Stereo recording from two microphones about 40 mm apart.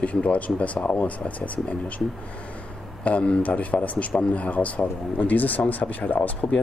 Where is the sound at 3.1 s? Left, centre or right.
Left.